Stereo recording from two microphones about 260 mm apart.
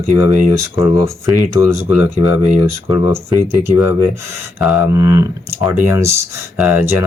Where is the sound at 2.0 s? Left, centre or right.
Left.